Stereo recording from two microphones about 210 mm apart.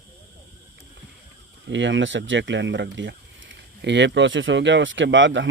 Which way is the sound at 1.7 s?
60° right (ahead or behind).